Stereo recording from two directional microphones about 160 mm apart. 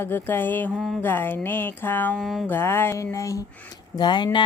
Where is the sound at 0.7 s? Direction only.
Centre (ahead or behind).